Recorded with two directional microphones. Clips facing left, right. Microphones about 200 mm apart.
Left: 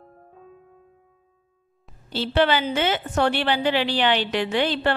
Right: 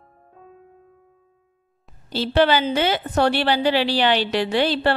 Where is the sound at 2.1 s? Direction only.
40° right (ahead or behind).